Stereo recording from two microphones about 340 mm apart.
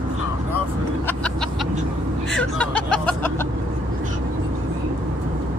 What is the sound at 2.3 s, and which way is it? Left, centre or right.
Music, centre.